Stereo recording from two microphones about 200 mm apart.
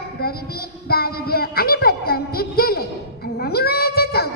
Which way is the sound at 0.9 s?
50° left (ahead or behind).